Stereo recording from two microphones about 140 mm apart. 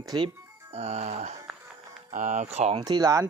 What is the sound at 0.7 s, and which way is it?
Speech, 50° right (ahead or behind).